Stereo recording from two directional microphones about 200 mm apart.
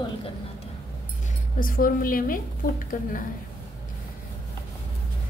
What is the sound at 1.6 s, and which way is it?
A woman's voice, 45° left (ahead or behind).